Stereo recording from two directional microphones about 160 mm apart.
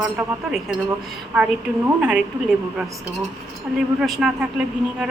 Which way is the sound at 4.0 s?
Centre (ahead or behind).